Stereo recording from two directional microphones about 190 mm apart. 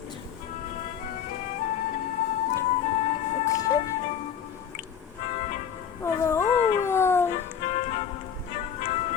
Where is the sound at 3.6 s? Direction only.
20° left (ahead or behind).